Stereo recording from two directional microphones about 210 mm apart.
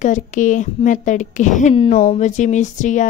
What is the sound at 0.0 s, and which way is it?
Speech, 35° left (ahead or behind).